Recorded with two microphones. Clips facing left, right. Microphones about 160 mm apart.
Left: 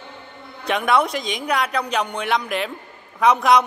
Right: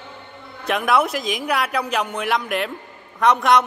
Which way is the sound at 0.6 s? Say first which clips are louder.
Even; 5° right (ahead or behind).